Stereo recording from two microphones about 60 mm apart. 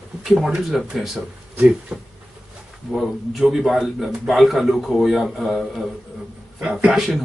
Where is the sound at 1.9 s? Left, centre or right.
Centre.